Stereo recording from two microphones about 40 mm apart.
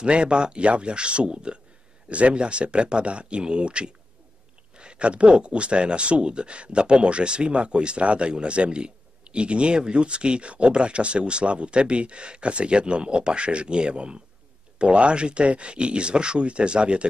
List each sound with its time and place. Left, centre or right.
0.0 s speech: right